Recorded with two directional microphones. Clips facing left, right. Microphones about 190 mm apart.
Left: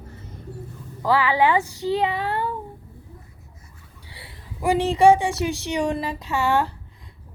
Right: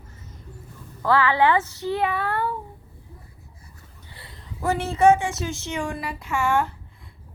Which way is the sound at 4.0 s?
75° left (ahead or behind).